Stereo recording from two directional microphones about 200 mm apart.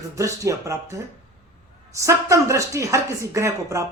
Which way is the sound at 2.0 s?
15° right (ahead or behind).